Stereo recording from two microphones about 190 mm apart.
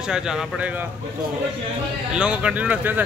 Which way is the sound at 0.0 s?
5° right (ahead or behind).